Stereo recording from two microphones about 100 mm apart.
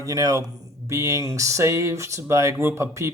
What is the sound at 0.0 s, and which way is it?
Speech, 35° right (ahead or behind).